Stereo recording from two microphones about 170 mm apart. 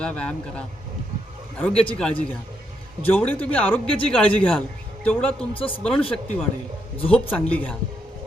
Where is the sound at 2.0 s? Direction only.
5° left (ahead or behind).